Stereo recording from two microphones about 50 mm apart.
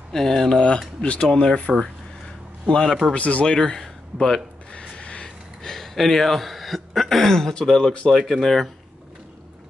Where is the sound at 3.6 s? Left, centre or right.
Centre.